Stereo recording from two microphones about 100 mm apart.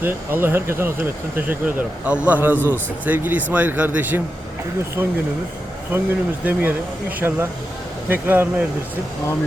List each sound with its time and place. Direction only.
0.0 s speech: 20° right (ahead or behind)